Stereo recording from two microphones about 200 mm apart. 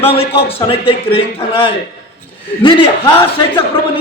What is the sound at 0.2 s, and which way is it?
A man's voice, 30° left (ahead or behind).